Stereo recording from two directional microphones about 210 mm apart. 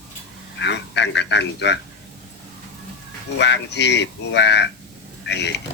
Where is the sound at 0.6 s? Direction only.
55° left (ahead or behind).